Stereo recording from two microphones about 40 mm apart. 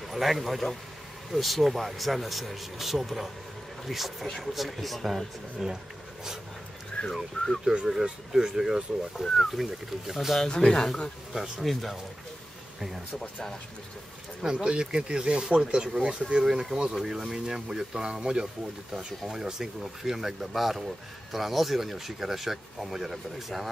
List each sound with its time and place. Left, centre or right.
0.1 s speech: centre
7.0 s speech: left
7.6 s speech: centre
9.2 s speech: centre
10.4 s speech: centre
11.3 s speech: centre
11.6 s speech: centre
14.4 s speech: right
17.3 s speech: centre